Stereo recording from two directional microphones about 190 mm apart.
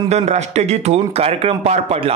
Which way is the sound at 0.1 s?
35° right (ahead or behind).